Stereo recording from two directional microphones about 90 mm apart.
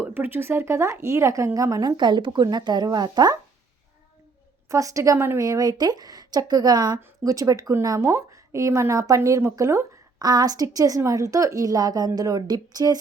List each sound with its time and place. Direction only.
0.0 s a woman's voice: 20° right (ahead or behind); by 3.3 s 50° right (ahead or behind)
4.7 s a woman's voice: 35° right (ahead or behind)
5.5 s a woman's voice: 45° right (ahead or behind)
7.7 s a woman's voice: 30° right (ahead or behind)
10.2 s a woman's voice: 45° right (ahead or behind)